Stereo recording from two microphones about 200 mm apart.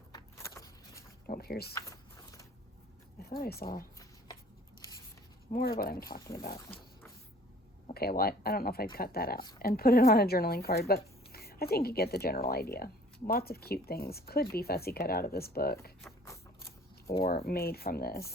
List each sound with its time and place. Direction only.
0.1 s vehicle: 15° left (ahead or behind)
1.3 s speech: 50° left (ahead or behind)
1.7 s walk: 15° left (ahead or behind)
3.2 s speech: 50° left (ahead or behind)
5.5 s speech: 45° left (ahead or behind)
7.9 s speech: 50° left (ahead or behind)
17.2 s speech: 45° left (ahead or behind)